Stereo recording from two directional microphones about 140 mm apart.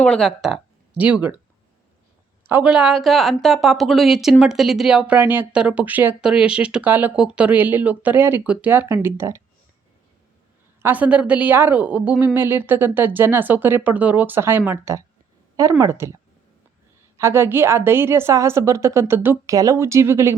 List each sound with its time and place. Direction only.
0.0 s speech: 5° left (ahead or behind)
2.5 s a woman's voice: 10° right (ahead or behind)
10.8 s a woman's voice: 10° right (ahead or behind)
17.2 s a woman's voice: 20° right (ahead or behind)